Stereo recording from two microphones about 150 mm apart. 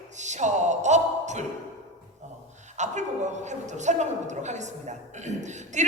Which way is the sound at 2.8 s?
50° right (ahead or behind).